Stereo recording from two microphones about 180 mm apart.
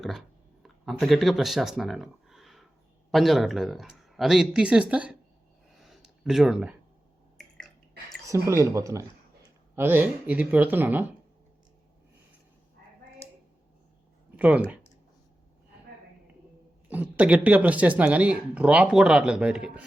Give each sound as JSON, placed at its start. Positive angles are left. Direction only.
{"t": 0.0, "sound": "a sound", "side_deg": 0}
{"t": 3.1, "sound": "speech", "side_deg": 0}
{"t": 5.9, "sound": "a sound", "side_deg": 0}
{"t": 8.3, "sound": "speech", "side_deg": -15}
{"t": 14.3, "sound": "speech", "side_deg": -10}
{"t": 16.9, "sound": "speech", "side_deg": -10}